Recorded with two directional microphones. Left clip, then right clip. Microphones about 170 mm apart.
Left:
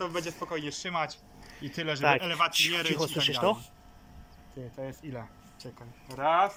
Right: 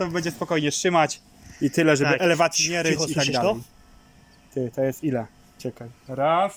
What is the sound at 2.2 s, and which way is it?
Speech, 70° right (ahead or behind).